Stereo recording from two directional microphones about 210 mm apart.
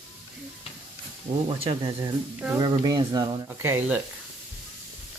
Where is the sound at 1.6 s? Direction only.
25° right (ahead or behind).